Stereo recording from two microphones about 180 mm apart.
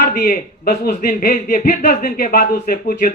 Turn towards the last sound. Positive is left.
turn(degrees=50)  # may be behind; listen again after turning